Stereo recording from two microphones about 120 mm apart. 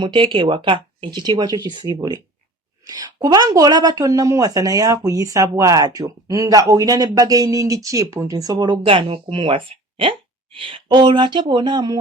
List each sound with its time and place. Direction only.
0.0 s a woman's voice: 40° right (ahead or behind)